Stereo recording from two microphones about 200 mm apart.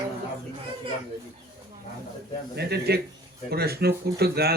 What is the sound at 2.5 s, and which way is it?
Speech, 55° right (ahead or behind).